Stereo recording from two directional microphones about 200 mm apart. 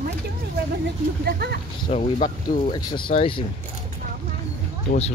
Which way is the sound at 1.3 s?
55° right (ahead or behind).